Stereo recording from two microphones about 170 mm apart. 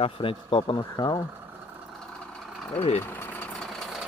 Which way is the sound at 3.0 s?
10° left (ahead or behind).